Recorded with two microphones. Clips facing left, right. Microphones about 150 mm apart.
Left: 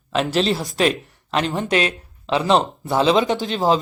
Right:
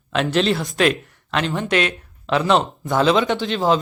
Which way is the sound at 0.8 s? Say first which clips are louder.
Even; 35° left (ahead or behind).